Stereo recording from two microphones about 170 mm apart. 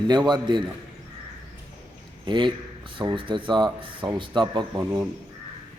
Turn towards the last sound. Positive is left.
turn(degrees=-20)  # may be behind; listen again after turning